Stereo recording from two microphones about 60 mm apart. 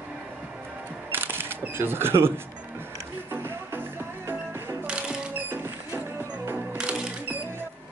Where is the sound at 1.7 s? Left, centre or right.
Right.